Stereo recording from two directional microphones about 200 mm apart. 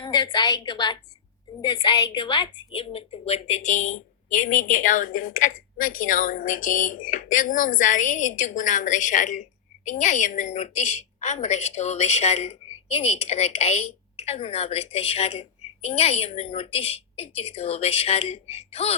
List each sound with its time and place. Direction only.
0.0 s a woman's voice: 20° left (ahead or behind)